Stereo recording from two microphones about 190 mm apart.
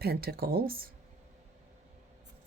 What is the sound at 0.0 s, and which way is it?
Speech, 55° right (ahead or behind).